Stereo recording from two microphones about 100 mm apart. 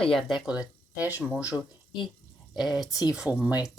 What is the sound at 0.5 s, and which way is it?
Speech, 15° right (ahead or behind).